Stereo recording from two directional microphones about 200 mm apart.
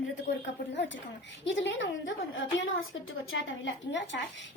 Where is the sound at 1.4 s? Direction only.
70° left (ahead or behind).